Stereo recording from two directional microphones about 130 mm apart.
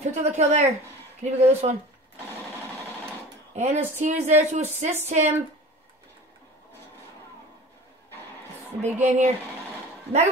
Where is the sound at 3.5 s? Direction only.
65° right (ahead or behind).